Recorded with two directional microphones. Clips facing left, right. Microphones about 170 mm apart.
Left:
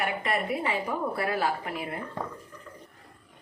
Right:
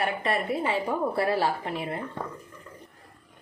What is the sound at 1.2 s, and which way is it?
Speech, 30° right (ahead or behind).